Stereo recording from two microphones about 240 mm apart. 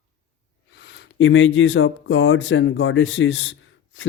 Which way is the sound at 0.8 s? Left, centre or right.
Left.